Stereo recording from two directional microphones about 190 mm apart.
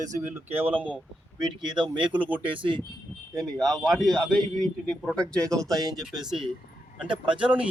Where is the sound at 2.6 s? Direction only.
25° right (ahead or behind).